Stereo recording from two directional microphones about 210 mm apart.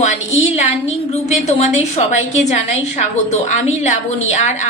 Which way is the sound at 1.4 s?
35° left (ahead or behind).